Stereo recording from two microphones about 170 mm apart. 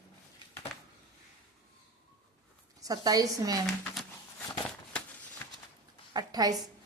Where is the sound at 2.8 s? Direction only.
20° right (ahead or behind).